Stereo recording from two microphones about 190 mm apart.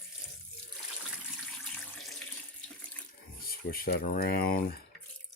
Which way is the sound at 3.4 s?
50° left (ahead or behind).